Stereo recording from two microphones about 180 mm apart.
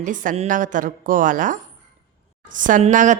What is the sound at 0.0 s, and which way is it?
A woman's voice, 45° right (ahead or behind).